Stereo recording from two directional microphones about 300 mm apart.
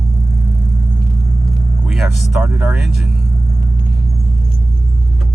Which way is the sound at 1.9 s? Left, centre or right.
Centre.